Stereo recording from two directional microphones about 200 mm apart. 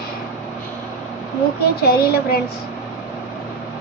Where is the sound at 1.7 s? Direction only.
50° left (ahead or behind).